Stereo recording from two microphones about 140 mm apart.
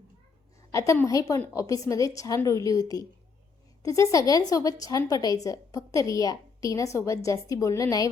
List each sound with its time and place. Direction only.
0.7 s a woman's voice: 20° left (ahead or behind)